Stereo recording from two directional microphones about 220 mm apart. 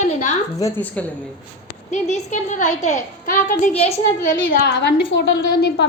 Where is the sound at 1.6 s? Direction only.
30° left (ahead or behind).